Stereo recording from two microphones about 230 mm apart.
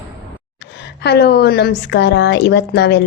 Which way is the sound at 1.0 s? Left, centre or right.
Left.